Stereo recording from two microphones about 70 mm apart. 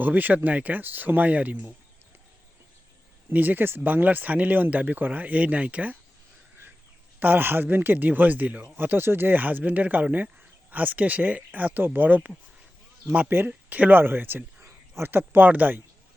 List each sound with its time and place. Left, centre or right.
0.0 s speech: right
3.2 s speech: right
7.2 s speech: right
13.5 s speech: right